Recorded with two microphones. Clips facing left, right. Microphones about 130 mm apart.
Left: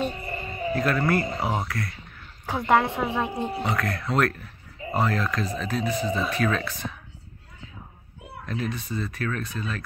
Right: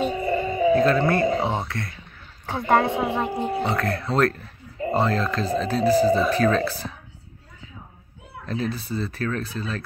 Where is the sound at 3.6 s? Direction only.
30° right (ahead or behind).